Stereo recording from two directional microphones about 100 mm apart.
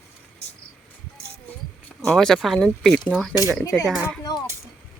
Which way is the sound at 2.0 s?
5° left (ahead or behind).